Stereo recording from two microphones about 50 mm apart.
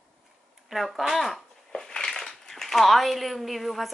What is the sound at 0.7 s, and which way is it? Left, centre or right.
Speech, centre.